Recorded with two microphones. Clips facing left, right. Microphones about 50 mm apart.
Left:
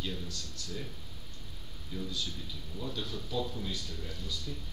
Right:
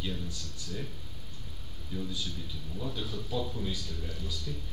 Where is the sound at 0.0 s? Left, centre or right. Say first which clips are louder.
Right 1 dB; centre.